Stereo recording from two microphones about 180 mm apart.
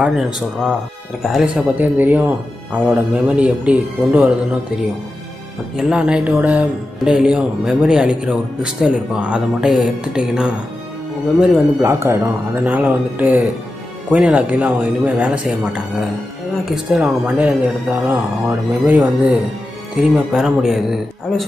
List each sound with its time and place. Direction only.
0.0 s speech: 5° right (ahead or behind)
5.8 s speech: 5° right (ahead or behind)
11.8 s speech: 15° right (ahead or behind)